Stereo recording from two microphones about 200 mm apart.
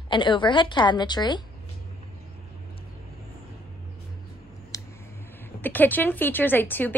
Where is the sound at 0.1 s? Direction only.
25° left (ahead or behind).